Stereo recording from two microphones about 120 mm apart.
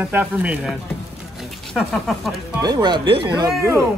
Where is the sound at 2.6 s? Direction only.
35° right (ahead or behind).